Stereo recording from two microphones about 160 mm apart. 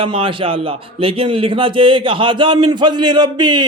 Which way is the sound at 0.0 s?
35° right (ahead or behind).